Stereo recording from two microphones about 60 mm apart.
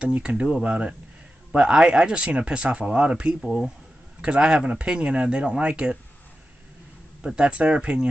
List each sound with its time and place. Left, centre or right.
0.0 s speech: right
7.2 s speech: centre